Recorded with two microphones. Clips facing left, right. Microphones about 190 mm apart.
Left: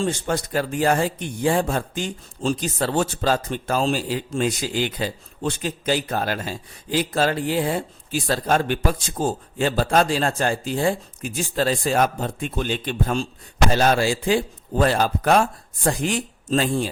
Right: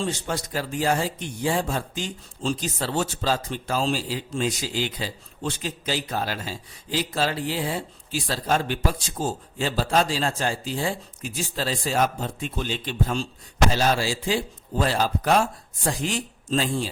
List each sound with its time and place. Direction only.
0.0 s a man's voice: 50° left (ahead or behind)